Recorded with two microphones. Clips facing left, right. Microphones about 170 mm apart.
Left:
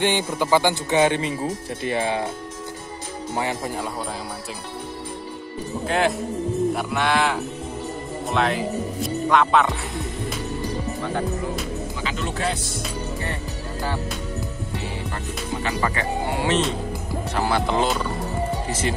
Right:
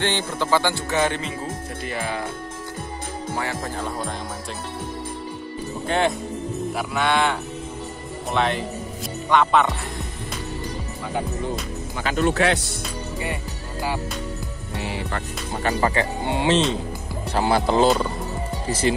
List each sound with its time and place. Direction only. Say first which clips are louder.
0.0 s speech: left 2 dB; 15° left (ahead or behind)
3.3 s speech: left 3 dB; 15° left (ahead or behind)
5.9 s speech: even; centre (ahead or behind)
12.0 s speech: right 11 dB; 50° right (ahead or behind)
14.8 s music: right 6 dB; 70° right (ahead or behind)
15.8 s speech: right 2 dB; 30° right (ahead or behind)